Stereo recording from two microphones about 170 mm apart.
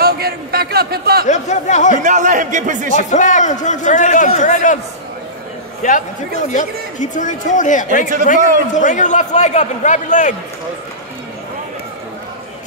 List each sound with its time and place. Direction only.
0.0 s a man's voice: 65° right (ahead or behind)
1.2 s a man's voice: 45° left (ahead or behind)
2.0 s speech: 45° right (ahead or behind)
2.9 s a man's voice: 45° left (ahead or behind)
5.8 s a man's voice: 50° left (ahead or behind)
8.4 s speech: 50° right (ahead or behind)
8.7 s a man's voice: 45° left (ahead or behind)